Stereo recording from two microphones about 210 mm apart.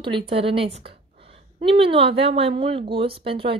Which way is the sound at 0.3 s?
25° right (ahead or behind).